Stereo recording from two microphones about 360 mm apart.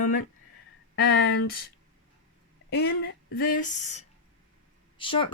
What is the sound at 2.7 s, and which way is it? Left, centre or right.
Speech, left.